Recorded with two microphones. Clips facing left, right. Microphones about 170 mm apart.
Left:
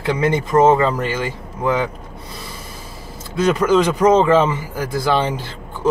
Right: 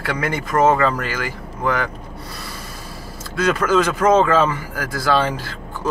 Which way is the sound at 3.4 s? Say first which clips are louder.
Left 2 dB; 15° left (ahead or behind).